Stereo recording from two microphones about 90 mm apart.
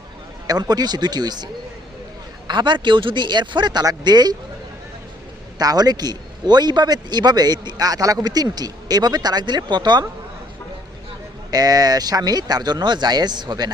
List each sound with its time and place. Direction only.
0.4 s a man's voice: 45° right (ahead or behind)
2.5 s a man's voice: 60° right (ahead or behind)
5.5 s a man's voice: 45° right (ahead or behind)
11.5 s a man's voice: 45° right (ahead or behind)